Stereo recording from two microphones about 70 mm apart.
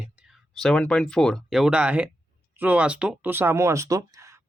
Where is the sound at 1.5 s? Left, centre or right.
Centre.